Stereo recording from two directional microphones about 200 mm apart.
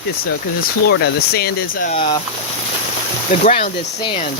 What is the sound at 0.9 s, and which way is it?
Speech, 55° left (ahead or behind).